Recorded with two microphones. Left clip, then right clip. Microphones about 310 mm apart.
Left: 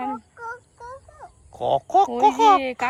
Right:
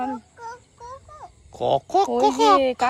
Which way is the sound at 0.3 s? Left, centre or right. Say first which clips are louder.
Left 2 dB; centre.